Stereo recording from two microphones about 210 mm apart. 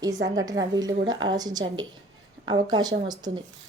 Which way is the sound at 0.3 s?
15° right (ahead or behind).